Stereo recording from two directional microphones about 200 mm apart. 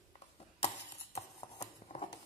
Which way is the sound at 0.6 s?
30° left (ahead or behind).